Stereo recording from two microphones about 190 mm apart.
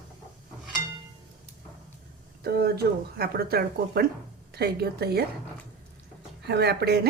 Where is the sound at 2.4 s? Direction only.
55° right (ahead or behind).